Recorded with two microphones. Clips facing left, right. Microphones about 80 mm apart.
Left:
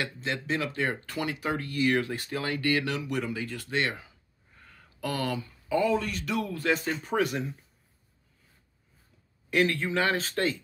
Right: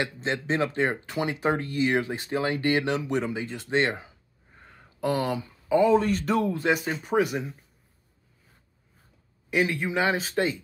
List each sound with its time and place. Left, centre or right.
0.0 s speech: right
6.5 s speech: centre
9.5 s speech: centre